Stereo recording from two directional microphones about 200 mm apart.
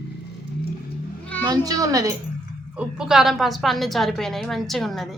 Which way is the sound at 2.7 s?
5° right (ahead or behind).